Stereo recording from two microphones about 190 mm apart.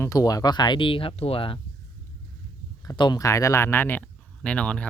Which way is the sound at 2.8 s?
20° left (ahead or behind).